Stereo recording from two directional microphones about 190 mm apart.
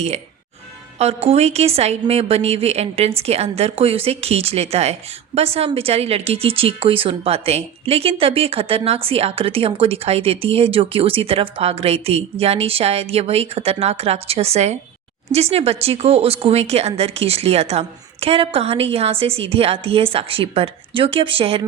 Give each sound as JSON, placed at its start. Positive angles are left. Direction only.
{"t": 0.9, "sound": "a woman's voice", "side_deg": -30}